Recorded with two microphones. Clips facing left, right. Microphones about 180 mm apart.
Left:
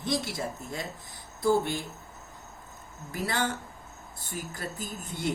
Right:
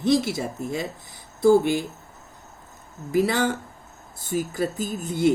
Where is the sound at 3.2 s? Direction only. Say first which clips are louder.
Right 7 dB; 90° right.